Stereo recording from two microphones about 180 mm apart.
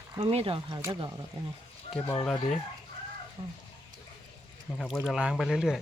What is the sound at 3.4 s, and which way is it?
Speech, 35° right (ahead or behind).